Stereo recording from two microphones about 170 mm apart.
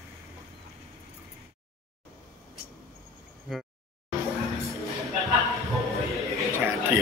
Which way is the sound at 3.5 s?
Centre (ahead or behind).